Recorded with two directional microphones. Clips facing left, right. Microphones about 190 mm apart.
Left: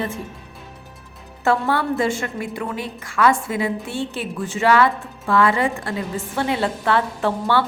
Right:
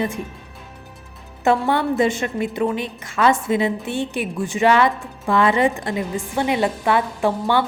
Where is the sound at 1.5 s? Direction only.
20° right (ahead or behind).